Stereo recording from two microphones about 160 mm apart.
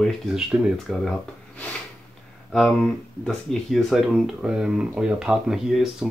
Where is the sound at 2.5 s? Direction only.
5° left (ahead or behind).